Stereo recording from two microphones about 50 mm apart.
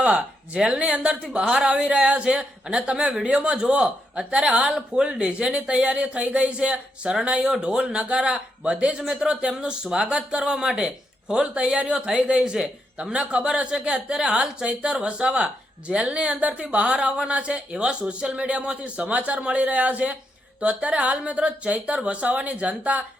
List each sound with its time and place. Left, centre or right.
0.0 s speech: right